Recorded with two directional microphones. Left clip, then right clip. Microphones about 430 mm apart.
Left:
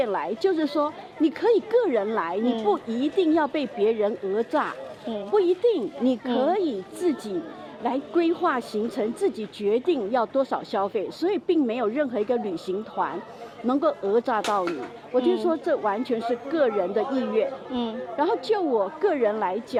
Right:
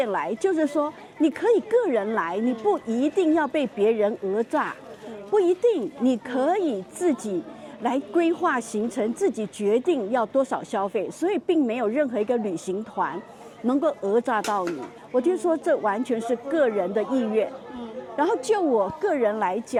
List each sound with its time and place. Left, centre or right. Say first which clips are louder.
0.0 s speech: even; centre
13.7 s speech: even; centre